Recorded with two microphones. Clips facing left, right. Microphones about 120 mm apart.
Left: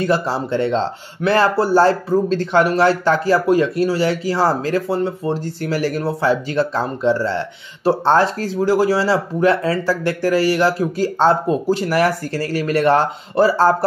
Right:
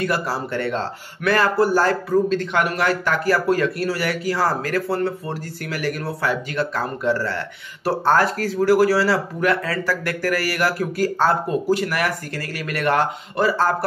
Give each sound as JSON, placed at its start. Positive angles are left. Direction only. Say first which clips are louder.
{"t": 0.0, "sound": "speech", "louder": "left 4 dB", "side_deg": 25}